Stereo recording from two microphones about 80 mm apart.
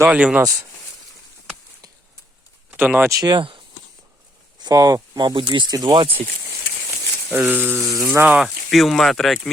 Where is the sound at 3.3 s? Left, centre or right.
Right.